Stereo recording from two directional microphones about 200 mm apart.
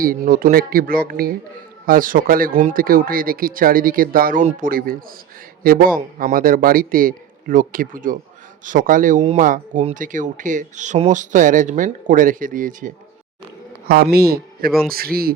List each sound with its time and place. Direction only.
0.0 s a man's voice: 45° right (ahead or behind)